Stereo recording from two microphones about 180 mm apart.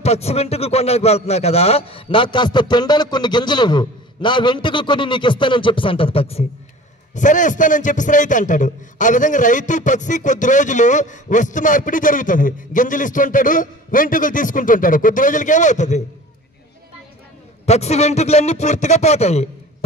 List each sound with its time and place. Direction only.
0.0 s a man's voice: 35° left (ahead or behind)
7.2 s a man's voice: 45° left (ahead or behind)
17.6 s speech: 35° left (ahead or behind)